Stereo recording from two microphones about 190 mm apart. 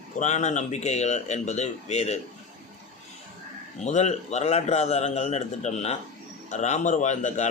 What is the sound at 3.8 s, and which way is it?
A man's voice, 40° left (ahead or behind).